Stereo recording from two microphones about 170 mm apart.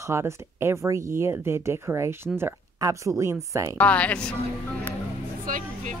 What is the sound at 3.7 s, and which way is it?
Speech, 5° left (ahead or behind).